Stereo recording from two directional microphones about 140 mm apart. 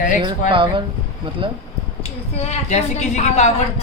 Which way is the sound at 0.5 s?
35° right (ahead or behind).